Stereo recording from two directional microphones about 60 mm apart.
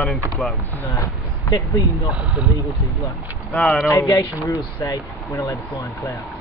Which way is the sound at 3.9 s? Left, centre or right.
Left.